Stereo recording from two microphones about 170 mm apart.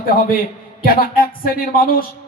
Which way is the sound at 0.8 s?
60° left (ahead or behind).